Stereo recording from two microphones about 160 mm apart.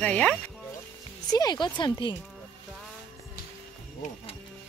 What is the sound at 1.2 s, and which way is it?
Speech, 25° left (ahead or behind).